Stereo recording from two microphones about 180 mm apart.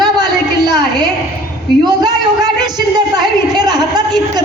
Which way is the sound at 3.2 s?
20° right (ahead or behind).